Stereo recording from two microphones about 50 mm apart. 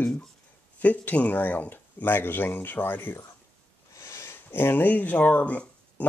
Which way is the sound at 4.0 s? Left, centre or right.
Left.